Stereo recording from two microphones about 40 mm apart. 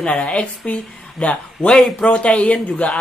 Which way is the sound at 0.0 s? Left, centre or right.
Left.